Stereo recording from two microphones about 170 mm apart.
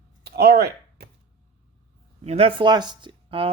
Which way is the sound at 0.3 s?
70° right (ahead or behind).